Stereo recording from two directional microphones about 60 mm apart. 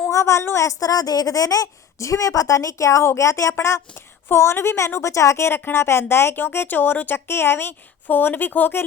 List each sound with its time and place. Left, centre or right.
0.1 s speech: left